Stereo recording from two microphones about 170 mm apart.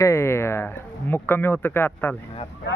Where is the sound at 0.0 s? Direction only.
15° left (ahead or behind).